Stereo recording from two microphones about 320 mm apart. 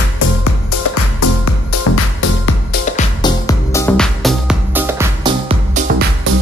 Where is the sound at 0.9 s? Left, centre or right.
Left.